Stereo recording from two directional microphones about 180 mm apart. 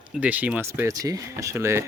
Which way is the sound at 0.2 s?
10° right (ahead or behind).